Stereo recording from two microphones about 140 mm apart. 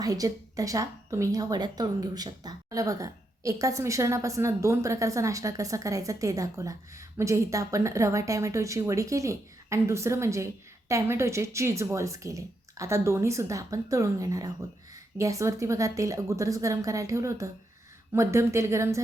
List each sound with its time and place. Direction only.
0.0 s a woman's voice: 25° right (ahead or behind)